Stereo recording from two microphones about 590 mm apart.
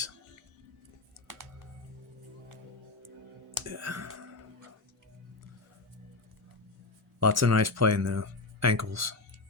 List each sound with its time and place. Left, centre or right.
3.7 s speech: right
7.2 s speech: right